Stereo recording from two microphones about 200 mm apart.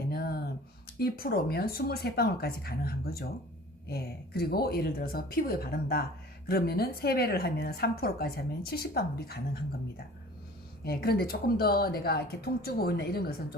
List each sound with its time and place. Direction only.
0.1 s a sound: 50° left (ahead or behind)
0.9 s a woman's voice: 50° left (ahead or behind)
4.4 s a woman's voice: 50° left (ahead or behind)
10.8 s a woman's voice: 50° left (ahead or behind)